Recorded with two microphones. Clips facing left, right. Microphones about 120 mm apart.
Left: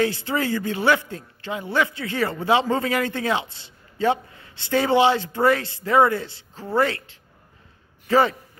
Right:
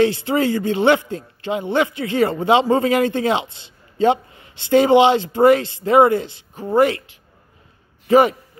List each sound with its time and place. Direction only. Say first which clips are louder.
0.0 s a man's voice: right 6 dB; 20° right (ahead or behind)